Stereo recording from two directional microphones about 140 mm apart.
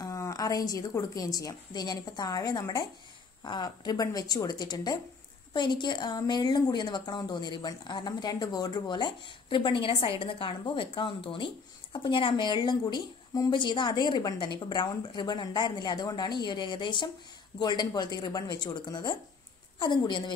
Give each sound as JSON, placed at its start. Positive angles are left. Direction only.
{"t": 0.0, "sound": "a woman's voice", "side_deg": 25}